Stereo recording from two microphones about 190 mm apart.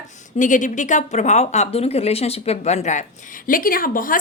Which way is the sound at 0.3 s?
40° left (ahead or behind).